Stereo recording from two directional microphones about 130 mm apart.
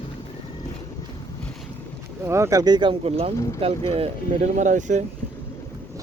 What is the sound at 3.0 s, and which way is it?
Speech, 50° right (ahead or behind).